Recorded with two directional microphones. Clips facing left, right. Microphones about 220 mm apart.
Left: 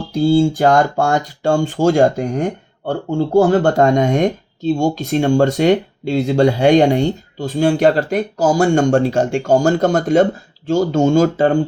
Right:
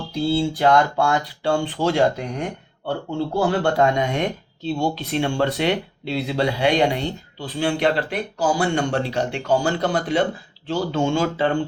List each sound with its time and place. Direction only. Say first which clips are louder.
0.1 s speech: left 8 dB; 45° left (ahead or behind)